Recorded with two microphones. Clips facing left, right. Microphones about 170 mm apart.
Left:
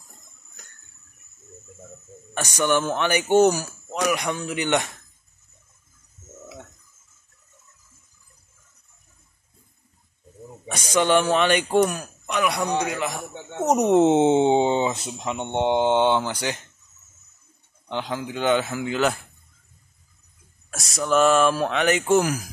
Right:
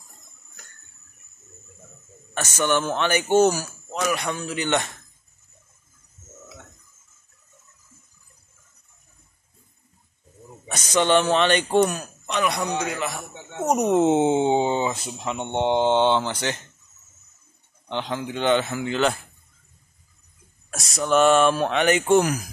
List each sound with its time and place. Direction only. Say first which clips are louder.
2.3 s speech: left 1 dB; 10° left (ahead or behind)
10.7 s a man's voice: even; 10° left (ahead or behind)
17.8 s speech: even; 10° left (ahead or behind)
20.7 s speech: right 1 dB; centre (ahead or behind)